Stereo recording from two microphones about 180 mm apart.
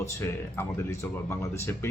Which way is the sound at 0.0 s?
15° left (ahead or behind).